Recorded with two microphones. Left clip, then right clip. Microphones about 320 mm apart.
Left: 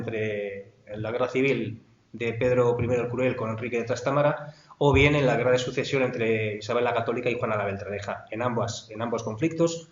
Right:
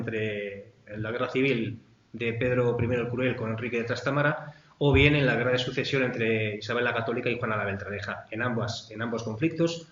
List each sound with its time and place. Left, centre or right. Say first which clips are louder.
0.0 s speech: left 2 dB; centre